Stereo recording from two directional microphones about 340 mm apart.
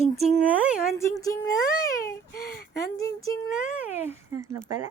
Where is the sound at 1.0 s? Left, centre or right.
Centre.